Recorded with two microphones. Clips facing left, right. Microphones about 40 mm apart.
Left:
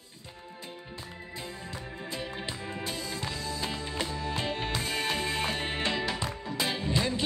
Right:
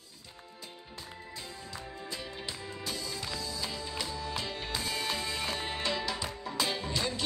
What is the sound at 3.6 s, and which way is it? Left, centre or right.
Music, left.